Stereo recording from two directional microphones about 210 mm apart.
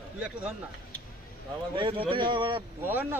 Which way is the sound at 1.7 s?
25° right (ahead or behind).